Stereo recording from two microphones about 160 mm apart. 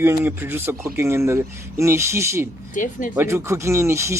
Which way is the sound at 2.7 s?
55° left (ahead or behind).